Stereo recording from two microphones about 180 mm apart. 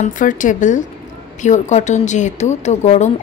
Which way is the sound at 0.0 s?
45° left (ahead or behind).